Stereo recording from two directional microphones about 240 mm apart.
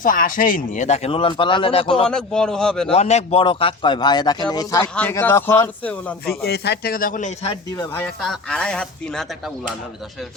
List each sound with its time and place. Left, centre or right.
0.0 s speech: left
2.0 s speech: centre
2.9 s speech: left; by 6.1 s centre
6.2 s a man's voice: left
8.0 s speech: centre